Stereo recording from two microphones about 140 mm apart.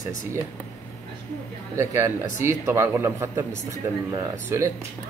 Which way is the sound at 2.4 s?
20° right (ahead or behind).